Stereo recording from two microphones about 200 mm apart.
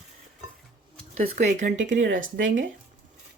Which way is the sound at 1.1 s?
40° right (ahead or behind).